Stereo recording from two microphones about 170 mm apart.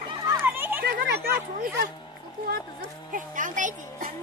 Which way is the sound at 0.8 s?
65° right (ahead or behind).